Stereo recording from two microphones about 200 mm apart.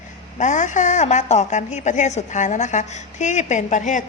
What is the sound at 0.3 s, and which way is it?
A woman's voice, 35° left (ahead or behind).